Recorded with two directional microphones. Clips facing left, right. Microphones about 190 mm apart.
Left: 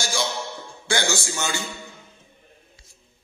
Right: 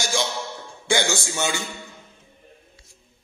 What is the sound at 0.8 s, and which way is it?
Speech, 20° right (ahead or behind).